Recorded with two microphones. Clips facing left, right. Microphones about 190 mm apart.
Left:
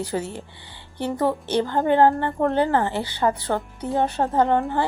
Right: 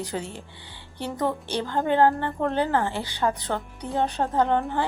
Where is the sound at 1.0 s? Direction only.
10° left (ahead or behind).